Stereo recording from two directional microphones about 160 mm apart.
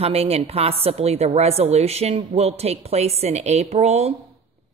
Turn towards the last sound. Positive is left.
turn(degrees=-40)  # may be behind; listen again after turning